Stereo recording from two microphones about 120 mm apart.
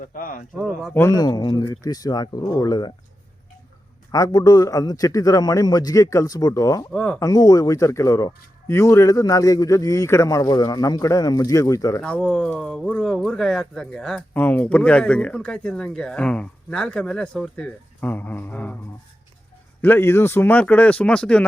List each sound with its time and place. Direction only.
0.0 s speech: 90° left
0.5 s speech: 5° right (ahead or behind)
0.9 s speech: 30° left (ahead or behind)
4.1 s speech: 30° left (ahead or behind)
6.9 s speech: 10° left (ahead or behind)
7.2 s speech: 30° left (ahead or behind)
12.0 s speech: 10° left (ahead or behind)
18.0 s speech: 15° left (ahead or behind)
19.8 s speech: 20° left (ahead or behind)